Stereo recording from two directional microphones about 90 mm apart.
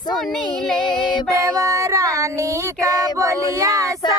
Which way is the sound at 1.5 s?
35° right (ahead or behind).